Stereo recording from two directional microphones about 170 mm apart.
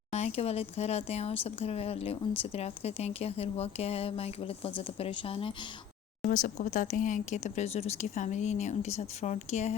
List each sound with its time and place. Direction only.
0.1 s a woman's voice: 40° left (ahead or behind)
6.2 s speech: 50° left (ahead or behind)